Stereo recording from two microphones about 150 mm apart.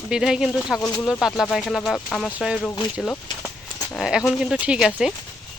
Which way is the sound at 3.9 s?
5° right (ahead or behind).